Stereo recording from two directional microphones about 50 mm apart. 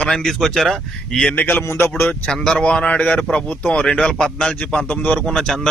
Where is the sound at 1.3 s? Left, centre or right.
Left.